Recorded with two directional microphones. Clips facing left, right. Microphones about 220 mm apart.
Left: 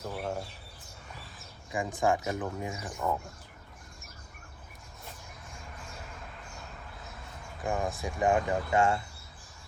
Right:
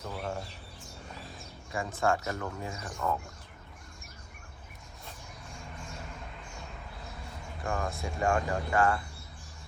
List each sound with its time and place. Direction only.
0.0 s bird: 5° left (ahead or behind)
1.7 s speech: 15° left (ahead or behind)
7.6 s speech: 15° left (ahead or behind)